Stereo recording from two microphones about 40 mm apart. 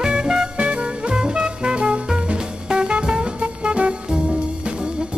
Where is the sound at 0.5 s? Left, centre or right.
Right.